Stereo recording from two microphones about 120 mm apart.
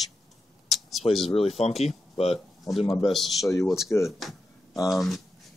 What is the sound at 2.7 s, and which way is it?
Speech, 45° left (ahead or behind).